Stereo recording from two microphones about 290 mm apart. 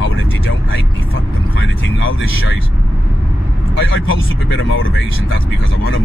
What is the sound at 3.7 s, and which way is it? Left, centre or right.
Speech, left.